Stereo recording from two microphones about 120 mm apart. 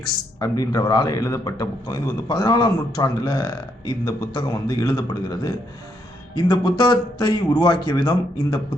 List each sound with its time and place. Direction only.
0.3 s a man's voice: 30° left (ahead or behind)